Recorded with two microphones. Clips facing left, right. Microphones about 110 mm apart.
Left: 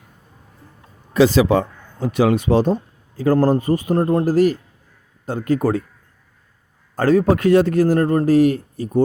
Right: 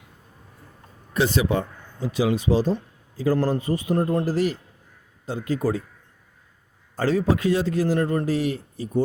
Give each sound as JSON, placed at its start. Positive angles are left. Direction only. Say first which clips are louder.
{"t": 1.1, "sound": "a man's voice", "louder": "left 8 dB", "side_deg": 90}
{"t": 2.0, "sound": "speech", "louder": "left 5 dB", "side_deg": 60}
{"t": 2.7, "sound": "a sound", "louder": "left 4 dB", "side_deg": 55}
{"t": 3.3, "sound": "a man's voice", "louder": "left 9 dB", "side_deg": 45}
{"t": 6.9, "sound": "a man's voice", "louder": "left 6 dB", "side_deg": 50}